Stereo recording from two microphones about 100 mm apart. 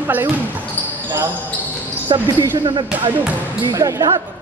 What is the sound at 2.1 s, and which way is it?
Speech, 45° right (ahead or behind).